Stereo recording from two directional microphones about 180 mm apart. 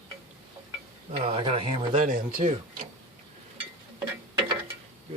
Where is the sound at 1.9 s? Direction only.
45° right (ahead or behind).